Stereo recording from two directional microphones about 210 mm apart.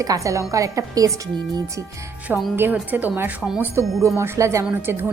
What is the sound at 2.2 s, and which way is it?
A woman's voice, 10° right (ahead or behind).